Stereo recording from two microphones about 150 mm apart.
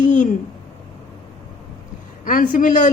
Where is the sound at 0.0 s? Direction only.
60° left (ahead or behind).